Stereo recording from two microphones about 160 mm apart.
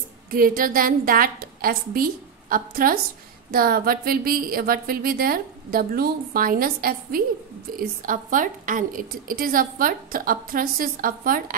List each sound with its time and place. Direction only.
0.3 s a woman's voice: 60° right (ahead or behind)